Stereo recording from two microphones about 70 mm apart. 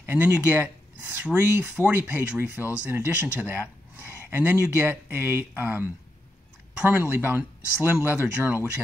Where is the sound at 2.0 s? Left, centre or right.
Right.